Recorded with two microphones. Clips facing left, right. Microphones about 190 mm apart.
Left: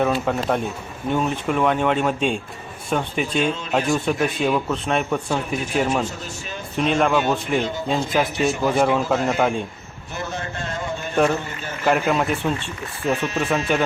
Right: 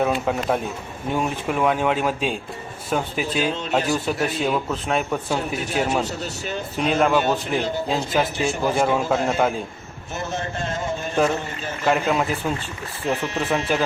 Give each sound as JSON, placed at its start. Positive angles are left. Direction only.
{"t": 0.0, "sound": "a man's voice", "side_deg": -5}
{"t": 6.1, "sound": "speech", "side_deg": -40}
{"t": 6.7, "sound": "a man's voice", "side_deg": 0}
{"t": 10.3, "sound": "a sound", "side_deg": -25}
{"t": 11.9, "sound": "a man's voice", "side_deg": 0}
{"t": 13.2, "sound": "speech", "side_deg": -15}